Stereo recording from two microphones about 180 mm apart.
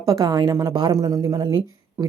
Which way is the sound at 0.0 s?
20° right (ahead or behind).